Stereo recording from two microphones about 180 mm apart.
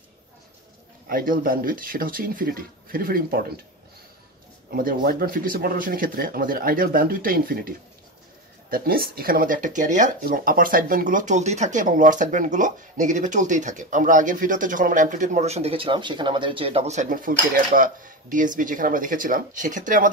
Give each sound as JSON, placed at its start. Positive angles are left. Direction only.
{"t": 1.0, "sound": "speech", "side_deg": -50}
{"t": 4.6, "sound": "speech", "side_deg": -55}